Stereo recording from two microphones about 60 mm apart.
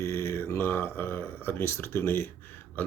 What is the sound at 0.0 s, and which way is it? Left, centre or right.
Speech, left.